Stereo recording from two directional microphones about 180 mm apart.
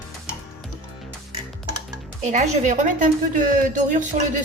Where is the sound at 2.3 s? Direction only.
40° right (ahead or behind).